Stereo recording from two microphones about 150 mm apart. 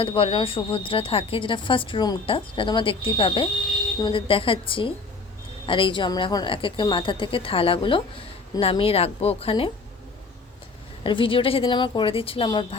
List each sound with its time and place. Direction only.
0.0 s a woman's voice: 35° left (ahead or behind)
11.0 s a woman's voice: 35° left (ahead or behind)